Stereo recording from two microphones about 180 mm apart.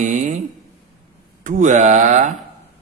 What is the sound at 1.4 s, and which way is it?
Speech, 45° right (ahead or behind).